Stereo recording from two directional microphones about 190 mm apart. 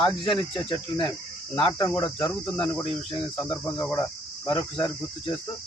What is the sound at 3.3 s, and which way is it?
Speech, 20° left (ahead or behind).